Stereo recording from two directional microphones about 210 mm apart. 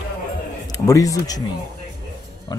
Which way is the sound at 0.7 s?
15° left (ahead or behind).